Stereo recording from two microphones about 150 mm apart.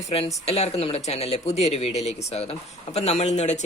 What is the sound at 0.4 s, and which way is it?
Speech, 45° left (ahead or behind).